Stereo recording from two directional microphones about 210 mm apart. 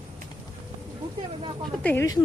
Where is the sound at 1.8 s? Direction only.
10° left (ahead or behind).